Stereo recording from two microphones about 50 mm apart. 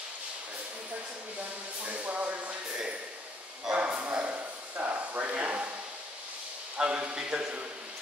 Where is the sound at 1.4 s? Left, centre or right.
Right.